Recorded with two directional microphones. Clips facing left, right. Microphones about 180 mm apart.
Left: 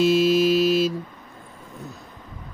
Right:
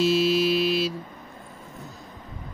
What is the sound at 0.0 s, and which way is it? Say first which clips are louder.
Mantra: left 3 dB; 50° left (ahead or behind).